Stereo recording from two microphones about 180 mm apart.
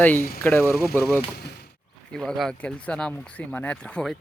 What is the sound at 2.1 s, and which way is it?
Speech, centre (ahead or behind).